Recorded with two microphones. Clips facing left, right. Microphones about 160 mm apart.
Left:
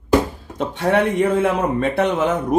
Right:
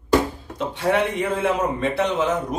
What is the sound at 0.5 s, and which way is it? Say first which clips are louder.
A man's voice: left 3 dB; 50° left (ahead or behind).